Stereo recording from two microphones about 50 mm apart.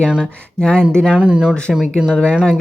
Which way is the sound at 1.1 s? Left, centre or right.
Right.